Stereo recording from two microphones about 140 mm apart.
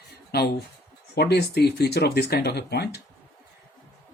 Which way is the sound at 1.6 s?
90° left.